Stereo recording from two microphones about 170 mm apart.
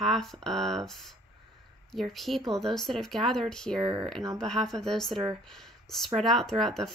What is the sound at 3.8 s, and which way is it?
Speech, 25° right (ahead or behind).